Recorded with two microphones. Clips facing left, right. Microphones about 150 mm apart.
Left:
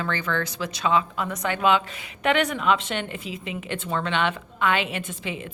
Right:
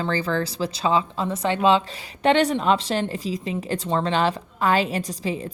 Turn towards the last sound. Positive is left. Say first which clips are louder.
# right 5 dB
turn(degrees=-35)  # may be behind; listen again after turning